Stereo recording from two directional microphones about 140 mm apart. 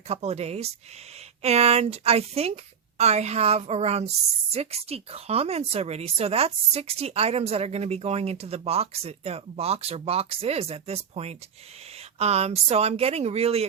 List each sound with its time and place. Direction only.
0.1 s speech: 50° right (ahead or behind)